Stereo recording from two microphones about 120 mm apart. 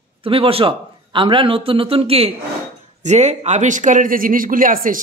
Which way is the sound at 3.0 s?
70° right (ahead or behind).